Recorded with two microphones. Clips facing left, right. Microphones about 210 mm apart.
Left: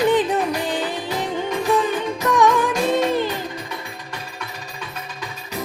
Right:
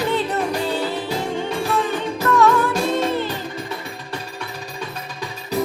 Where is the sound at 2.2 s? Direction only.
15° left (ahead or behind).